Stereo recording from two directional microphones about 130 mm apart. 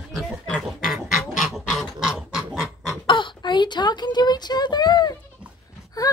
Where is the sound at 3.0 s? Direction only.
40° left (ahead or behind).